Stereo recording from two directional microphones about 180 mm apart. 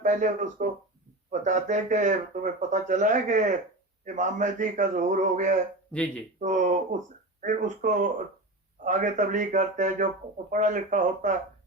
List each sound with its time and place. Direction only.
0.0 s speech: 45° right (ahead or behind)
5.9 s speech: 5° left (ahead or behind)
6.4 s speech: 45° right (ahead or behind)